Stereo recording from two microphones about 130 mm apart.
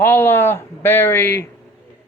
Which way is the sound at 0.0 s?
15° left (ahead or behind).